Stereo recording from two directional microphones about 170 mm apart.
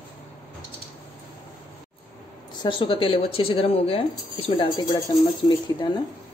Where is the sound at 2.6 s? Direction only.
30° left (ahead or behind).